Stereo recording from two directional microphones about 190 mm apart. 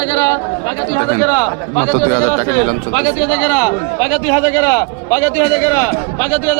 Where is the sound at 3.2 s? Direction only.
15° left (ahead or behind).